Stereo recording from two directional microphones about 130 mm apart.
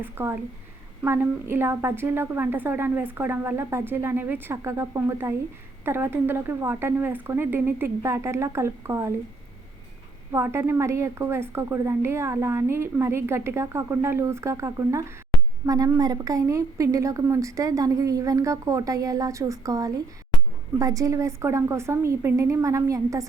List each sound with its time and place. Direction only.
0.0 s a woman's voice: 15° right (ahead or behind)
10.3 s a woman's voice: 20° right (ahead or behind)